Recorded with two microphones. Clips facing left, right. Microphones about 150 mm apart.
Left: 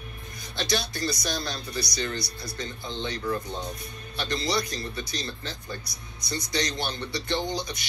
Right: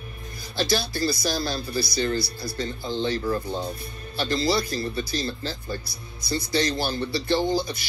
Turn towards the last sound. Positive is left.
turn(degrees=-5)  # may be behind; listen again after turning